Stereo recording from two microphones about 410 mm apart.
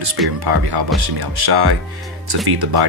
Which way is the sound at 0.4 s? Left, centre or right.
Right.